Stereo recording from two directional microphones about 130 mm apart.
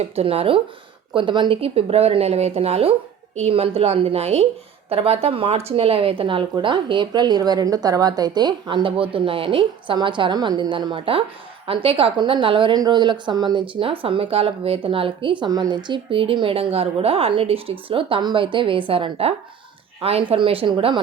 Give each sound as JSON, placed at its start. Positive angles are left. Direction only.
{"t": 0.0, "sound": "a woman's voice", "side_deg": -50}